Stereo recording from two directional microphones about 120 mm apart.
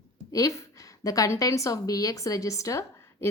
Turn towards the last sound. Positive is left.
turn(degrees=25)  # may be behind; listen again after turning